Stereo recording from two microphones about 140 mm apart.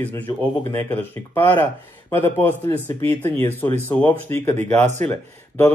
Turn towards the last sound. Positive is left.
turn(degrees=15)  # may be behind; listen again after turning